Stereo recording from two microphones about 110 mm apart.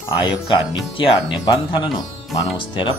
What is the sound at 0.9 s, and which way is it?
Speech, 50° left (ahead or behind).